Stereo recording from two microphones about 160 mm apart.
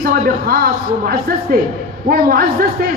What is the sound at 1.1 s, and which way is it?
A man's voice, 70° right (ahead or behind).